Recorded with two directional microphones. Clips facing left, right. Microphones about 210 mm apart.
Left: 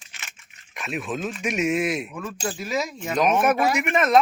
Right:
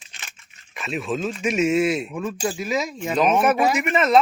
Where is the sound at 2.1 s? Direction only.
20° right (ahead or behind).